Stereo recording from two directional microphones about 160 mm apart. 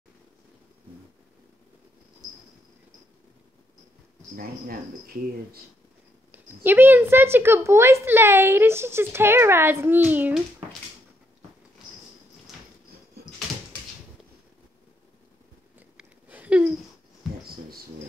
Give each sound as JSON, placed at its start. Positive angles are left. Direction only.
{"t": 4.4, "sound": "speech", "side_deg": -65}
{"t": 6.3, "sound": "a woman's voice", "side_deg": -10}
{"t": 16.0, "sound": "chewing", "side_deg": -10}